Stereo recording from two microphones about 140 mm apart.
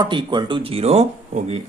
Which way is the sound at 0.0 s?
35° right (ahead or behind).